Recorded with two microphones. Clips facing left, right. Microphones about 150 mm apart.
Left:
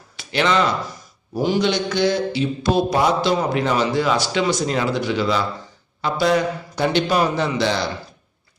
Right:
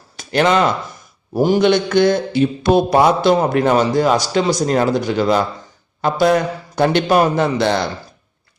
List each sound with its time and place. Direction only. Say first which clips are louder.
0.2 s a man's voice: right 4 dB; 45° right (ahead or behind)